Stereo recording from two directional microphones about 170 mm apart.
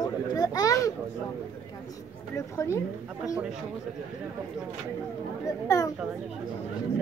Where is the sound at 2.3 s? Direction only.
15° left (ahead or behind).